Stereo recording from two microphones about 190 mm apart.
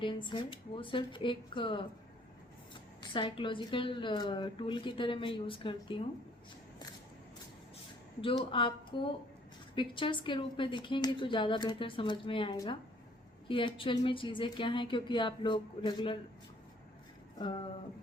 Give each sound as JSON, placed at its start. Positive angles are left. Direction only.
{"t": 0.0, "sound": "a woman's voice", "side_deg": 25}
{"t": 3.0, "sound": "a woman's voice", "side_deg": 25}
{"t": 8.4, "sound": "a woman's voice", "side_deg": 25}
{"t": 17.3, "sound": "a sound", "side_deg": 25}